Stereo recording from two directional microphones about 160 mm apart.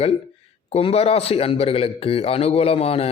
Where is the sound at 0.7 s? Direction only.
35° left (ahead or behind).